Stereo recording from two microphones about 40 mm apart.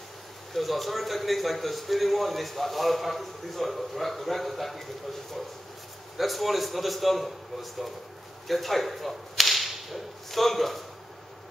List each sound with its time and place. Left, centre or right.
0.5 s a man's voice: centre
6.1 s a man's voice: centre
8.5 s whip: centre